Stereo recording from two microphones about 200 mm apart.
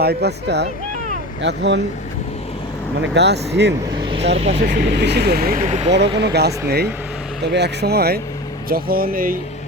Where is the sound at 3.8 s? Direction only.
25° right (ahead or behind).